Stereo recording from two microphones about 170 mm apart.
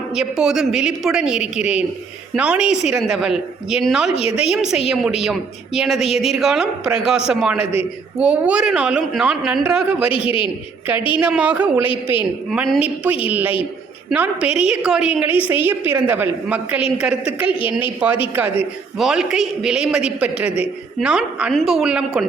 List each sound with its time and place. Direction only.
0.1 s a man's voice: 5° right (ahead or behind)
4.1 s a woman's voice: 35° left (ahead or behind)
4.5 s a man's voice: 5° right (ahead or behind)
10.2 s a woman's voice: 30° left (ahead or behind)
11.1 s a woman's voice: 5° right (ahead or behind)